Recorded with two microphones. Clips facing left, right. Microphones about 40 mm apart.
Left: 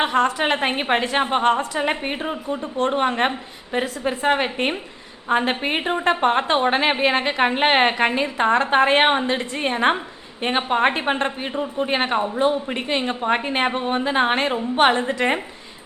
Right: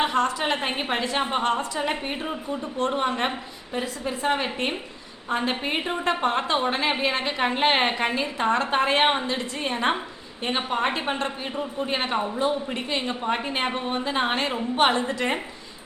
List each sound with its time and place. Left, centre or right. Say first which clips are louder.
0.2 s speech: left 4 dB; left
4.4 s a woman's voice: left 4 dB; left
11.5 s a man's voice: left 5 dB; centre
11.9 s speech: left 4 dB; left